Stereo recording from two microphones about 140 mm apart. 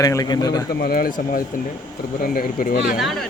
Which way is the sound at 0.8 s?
90° left.